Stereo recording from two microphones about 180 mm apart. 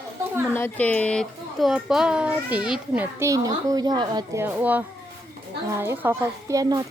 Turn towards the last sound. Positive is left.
turn(degrees=-20)  # may be behind; listen again after turning